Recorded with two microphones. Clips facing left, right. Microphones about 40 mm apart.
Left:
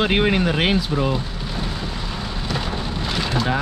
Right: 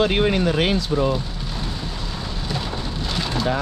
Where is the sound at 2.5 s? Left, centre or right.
Centre.